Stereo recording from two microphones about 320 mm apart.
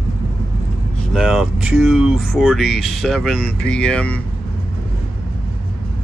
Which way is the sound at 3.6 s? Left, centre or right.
Centre.